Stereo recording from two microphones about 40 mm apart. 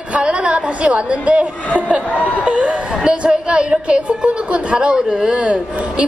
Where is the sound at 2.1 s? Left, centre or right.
Left.